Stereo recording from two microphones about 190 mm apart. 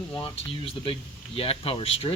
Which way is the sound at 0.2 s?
30° left (ahead or behind).